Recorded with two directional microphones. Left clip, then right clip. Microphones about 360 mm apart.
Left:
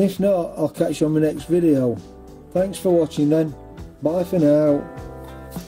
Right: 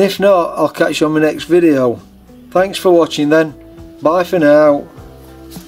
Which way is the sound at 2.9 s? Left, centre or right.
Right.